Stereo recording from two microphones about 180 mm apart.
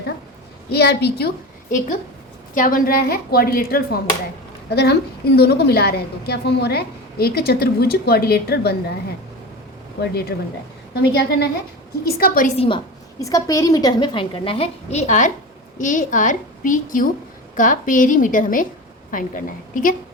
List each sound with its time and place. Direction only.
0.7 s a woman's voice: 65° left (ahead or behind)
2.6 s a woman's voice: 50° left (ahead or behind)
10.0 s a woman's voice: 60° left (ahead or behind)
12.5 s a woman's voice: 30° left (ahead or behind); by 20.0 s 50° left (ahead or behind)